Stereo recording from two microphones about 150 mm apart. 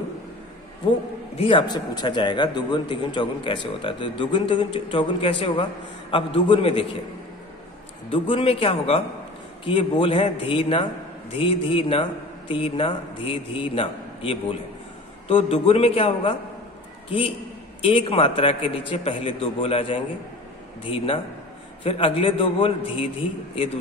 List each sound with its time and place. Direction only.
1.4 s a man's voice: 30° left (ahead or behind)
8.1 s a man's voice: 35° left (ahead or behind)
17.8 s a man's voice: 35° left (ahead or behind)